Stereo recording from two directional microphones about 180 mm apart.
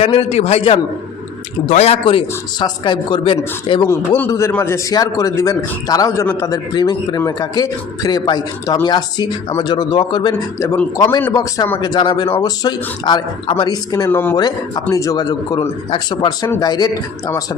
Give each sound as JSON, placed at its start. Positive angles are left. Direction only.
{"t": 0.0, "sound": "a man's voice", "side_deg": 30}
{"t": 3.8, "sound": "speech", "side_deg": 15}